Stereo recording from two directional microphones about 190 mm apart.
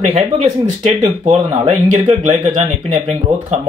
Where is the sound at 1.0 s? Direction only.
35° right (ahead or behind).